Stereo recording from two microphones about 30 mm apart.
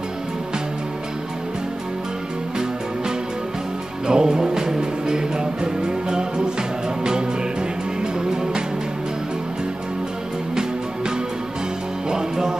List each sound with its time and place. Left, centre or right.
4.1 s music: right
8.0 s music: right
12.1 s music: right